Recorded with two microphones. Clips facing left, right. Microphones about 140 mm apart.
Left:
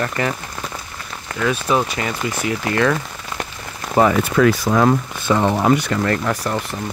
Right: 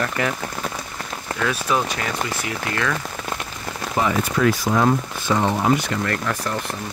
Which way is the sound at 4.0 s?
75° left (ahead or behind).